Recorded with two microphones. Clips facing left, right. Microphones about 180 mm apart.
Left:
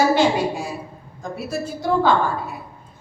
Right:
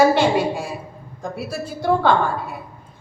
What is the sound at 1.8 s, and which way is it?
Speech, 55° right (ahead or behind).